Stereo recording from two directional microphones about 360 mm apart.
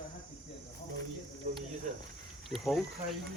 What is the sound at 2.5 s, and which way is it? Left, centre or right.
Speech, centre.